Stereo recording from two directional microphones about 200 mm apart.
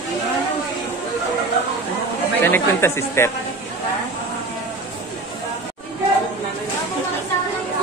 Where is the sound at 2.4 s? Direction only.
10° left (ahead or behind).